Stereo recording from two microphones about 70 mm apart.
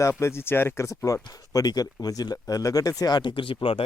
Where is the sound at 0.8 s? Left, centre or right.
Left.